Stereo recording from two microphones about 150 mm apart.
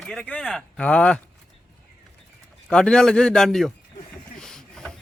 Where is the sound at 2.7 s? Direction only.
5° left (ahead or behind).